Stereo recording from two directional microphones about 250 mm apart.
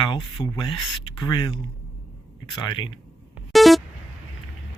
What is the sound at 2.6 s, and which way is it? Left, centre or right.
Speech, centre.